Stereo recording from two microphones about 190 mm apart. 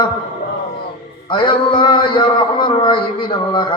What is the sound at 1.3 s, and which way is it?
A man's voice, 25° left (ahead or behind).